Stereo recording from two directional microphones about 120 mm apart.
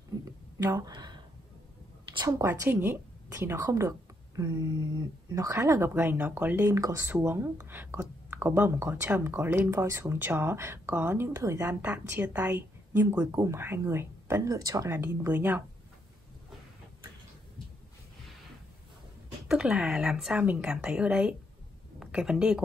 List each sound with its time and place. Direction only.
0.6 s speech: 25° right (ahead or behind)
2.2 s a woman's voice: 25° right (ahead or behind)
11.8 s speech: 15° right (ahead or behind)
19.4 s speech: 5° right (ahead or behind)